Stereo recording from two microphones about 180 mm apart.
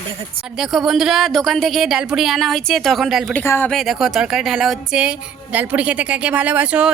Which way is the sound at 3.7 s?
Centre (ahead or behind).